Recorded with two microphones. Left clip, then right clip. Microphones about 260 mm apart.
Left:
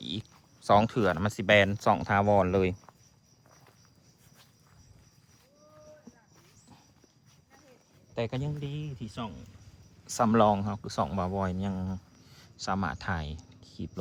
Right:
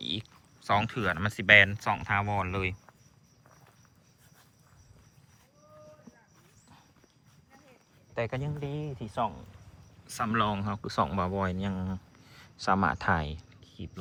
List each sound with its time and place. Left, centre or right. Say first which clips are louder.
0.0 s speech: right 3 dB; centre
8.1 s speech: right 1 dB; centre
8.7 s speech: right 6 dB; centre
10.1 s speech: left 5 dB; left; by 13.3 s centre
13.3 s a sound: left 1 dB; centre